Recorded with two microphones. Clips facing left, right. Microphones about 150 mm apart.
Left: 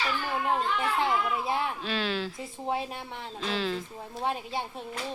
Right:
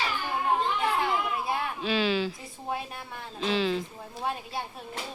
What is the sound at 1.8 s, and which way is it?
Speech, centre (ahead or behind).